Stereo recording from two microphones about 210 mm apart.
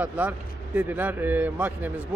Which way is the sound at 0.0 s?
5° right (ahead or behind).